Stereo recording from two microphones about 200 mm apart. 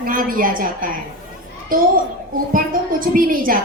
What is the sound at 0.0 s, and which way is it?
Speech, 45° right (ahead or behind).